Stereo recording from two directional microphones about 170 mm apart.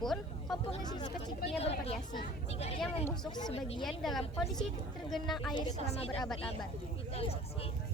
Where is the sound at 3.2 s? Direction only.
25° left (ahead or behind).